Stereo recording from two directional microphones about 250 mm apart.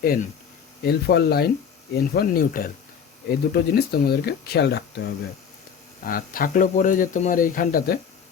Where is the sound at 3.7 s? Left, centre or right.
Left.